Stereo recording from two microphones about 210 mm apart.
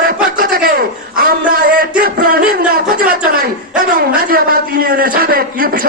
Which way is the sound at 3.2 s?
45° right (ahead or behind).